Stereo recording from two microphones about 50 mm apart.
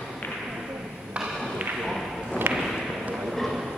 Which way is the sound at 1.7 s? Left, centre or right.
Centre.